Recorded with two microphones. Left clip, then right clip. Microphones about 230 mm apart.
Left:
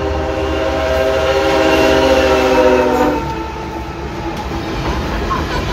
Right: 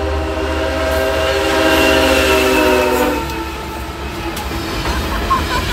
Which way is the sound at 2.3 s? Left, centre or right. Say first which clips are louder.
Left 1 dB; right.